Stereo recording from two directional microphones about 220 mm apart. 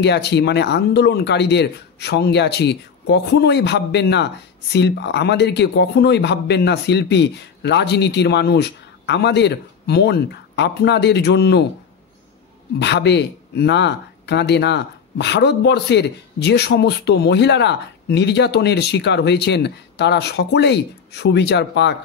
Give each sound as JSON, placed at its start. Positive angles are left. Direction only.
{"t": 0.0, "sound": "speech", "side_deg": 50}
{"t": 12.7, "sound": "speech", "side_deg": 50}